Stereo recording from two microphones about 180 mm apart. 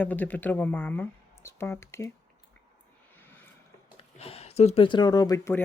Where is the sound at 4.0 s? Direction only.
35° left (ahead or behind); by 5.6 s 15° left (ahead or behind).